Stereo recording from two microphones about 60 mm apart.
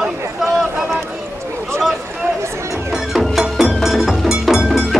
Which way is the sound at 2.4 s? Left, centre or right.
Right.